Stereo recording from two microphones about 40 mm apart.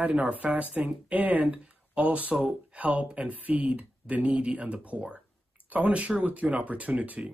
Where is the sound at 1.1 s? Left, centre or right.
Right.